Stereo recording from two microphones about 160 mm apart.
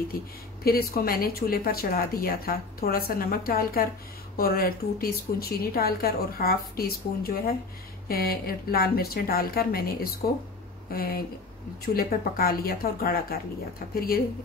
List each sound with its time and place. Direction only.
0.1 s a woman's voice: 65° left (ahead or behind)